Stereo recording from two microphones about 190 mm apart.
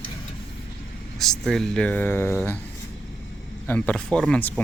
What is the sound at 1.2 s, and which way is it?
Speech, centre (ahead or behind).